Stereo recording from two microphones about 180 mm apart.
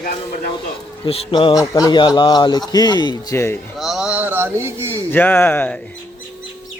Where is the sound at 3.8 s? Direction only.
Centre (ahead or behind).